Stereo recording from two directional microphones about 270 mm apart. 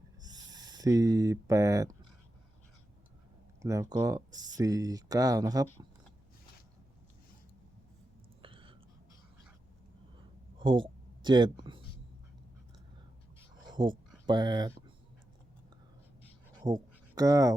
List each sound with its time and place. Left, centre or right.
0.2 s speech: centre
3.6 s speech: centre
8.4 s whispering: centre
10.6 s speech: centre
13.7 s a sound: centre
14.3 s speech: centre
16.6 s a sound: centre